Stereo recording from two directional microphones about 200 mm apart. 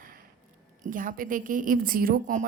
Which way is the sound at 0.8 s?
40° right (ahead or behind).